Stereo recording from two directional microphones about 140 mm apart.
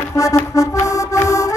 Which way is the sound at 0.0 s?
20° left (ahead or behind).